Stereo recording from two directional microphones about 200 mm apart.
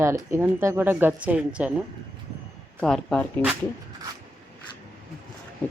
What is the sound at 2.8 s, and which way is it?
Speech, 5° left (ahead or behind).